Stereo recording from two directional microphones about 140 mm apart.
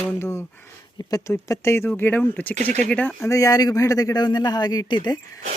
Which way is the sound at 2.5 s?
55° right (ahead or behind).